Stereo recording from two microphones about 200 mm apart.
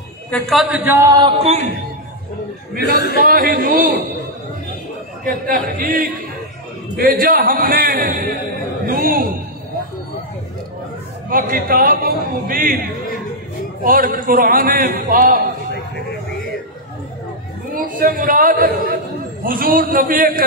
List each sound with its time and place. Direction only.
0.3 s a man's voice: centre (ahead or behind); by 1.3 s 20° right (ahead or behind)
1.4 s music: 35° right (ahead or behind)
2.8 s speech: 55° left (ahead or behind)
3.3 s a man's voice: 45° right (ahead or behind)
5.2 s a man's voice: 45° right (ahead or behind)
11.2 s a man's voice: 45° right (ahead or behind)
13.8 s a man's voice: 45° right (ahead or behind)
17.7 s a woman's voice: 45° right (ahead or behind)